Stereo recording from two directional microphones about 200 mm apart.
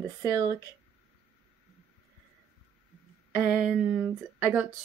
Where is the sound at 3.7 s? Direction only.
5° right (ahead or behind).